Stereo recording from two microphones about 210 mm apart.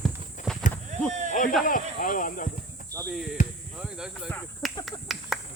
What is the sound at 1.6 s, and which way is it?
Speech, 40° left (ahead or behind).